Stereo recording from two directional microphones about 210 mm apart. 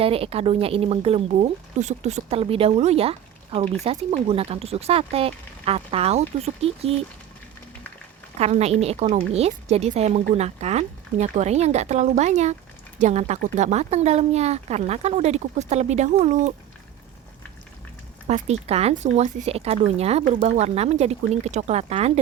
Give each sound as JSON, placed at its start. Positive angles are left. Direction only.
{"t": 0.0, "sound": "speech", "side_deg": -25}
{"t": 8.4, "sound": "speech", "side_deg": -30}
{"t": 18.3, "sound": "speech", "side_deg": -30}